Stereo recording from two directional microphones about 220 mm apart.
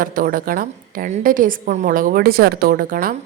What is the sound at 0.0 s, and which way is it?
A woman's voice, 40° right (ahead or behind).